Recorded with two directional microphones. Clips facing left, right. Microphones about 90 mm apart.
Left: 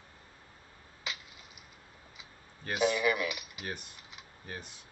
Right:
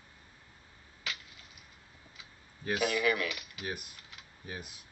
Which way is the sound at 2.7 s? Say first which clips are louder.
Left 2 dB; 25° left (ahead or behind).